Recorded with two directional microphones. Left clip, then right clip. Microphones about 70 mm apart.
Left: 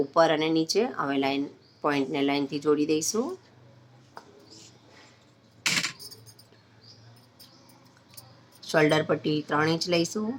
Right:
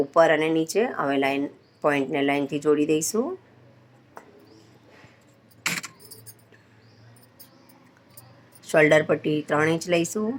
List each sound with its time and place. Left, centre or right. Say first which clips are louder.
0.0 s speech: right 4 dB; centre
8.6 s speech: right 5 dB; centre
9.7 s speech: right 2 dB; right